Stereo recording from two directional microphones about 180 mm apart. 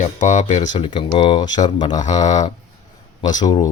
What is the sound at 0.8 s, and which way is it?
Speech, 25° left (ahead or behind).